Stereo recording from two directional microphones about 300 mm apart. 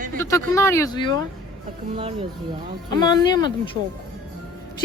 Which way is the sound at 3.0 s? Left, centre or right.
Centre.